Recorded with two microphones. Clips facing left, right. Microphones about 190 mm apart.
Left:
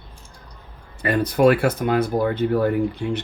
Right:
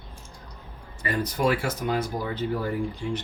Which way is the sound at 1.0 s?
65° left (ahead or behind).